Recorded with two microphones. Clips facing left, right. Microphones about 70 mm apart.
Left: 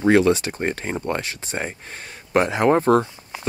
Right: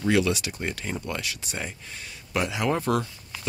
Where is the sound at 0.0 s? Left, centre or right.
Left.